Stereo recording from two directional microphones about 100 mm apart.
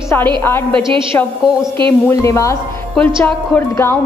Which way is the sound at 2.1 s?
30° left (ahead or behind).